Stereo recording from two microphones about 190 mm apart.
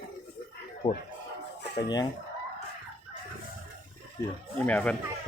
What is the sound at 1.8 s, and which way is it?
Speech, 20° left (ahead or behind).